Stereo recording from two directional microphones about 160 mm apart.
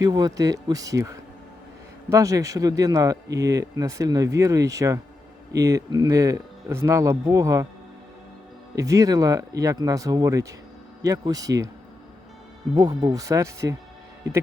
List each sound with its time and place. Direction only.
0.0 s speech: 25° right (ahead or behind)
8.7 s speech: 20° right (ahead or behind)
12.7 s speech: 25° right (ahead or behind)